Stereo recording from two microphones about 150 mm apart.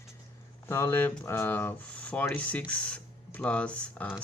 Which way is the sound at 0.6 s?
15° left (ahead or behind).